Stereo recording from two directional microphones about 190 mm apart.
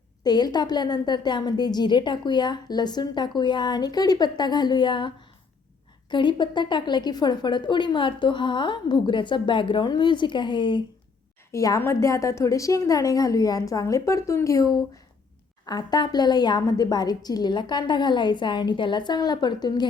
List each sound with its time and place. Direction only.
0.3 s a woman's voice: 20° left (ahead or behind)